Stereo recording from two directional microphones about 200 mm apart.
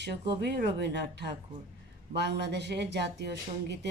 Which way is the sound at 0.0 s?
55° right (ahead or behind).